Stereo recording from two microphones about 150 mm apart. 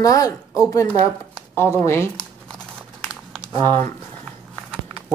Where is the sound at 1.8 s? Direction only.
15° left (ahead or behind).